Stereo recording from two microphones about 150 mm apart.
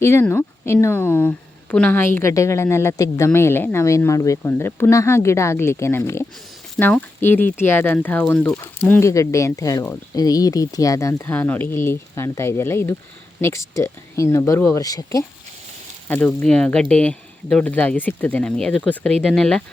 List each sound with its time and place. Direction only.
0.0 s a woman's voice: 15° left (ahead or behind)
16.0 s a woman's voice: 10° left (ahead or behind)